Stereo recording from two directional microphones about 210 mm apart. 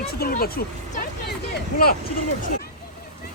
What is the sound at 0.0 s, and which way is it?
Speech, 45° left (ahead or behind).